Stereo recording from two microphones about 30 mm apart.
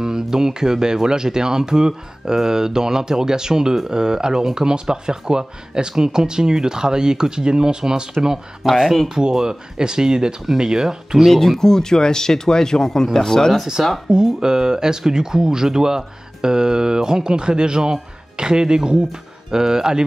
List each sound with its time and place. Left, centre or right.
0.0 s speech: right
8.6 s speech: centre
9.3 s speech: right
11.3 s speech: centre
11.6 s speech: centre
13.8 s speech: right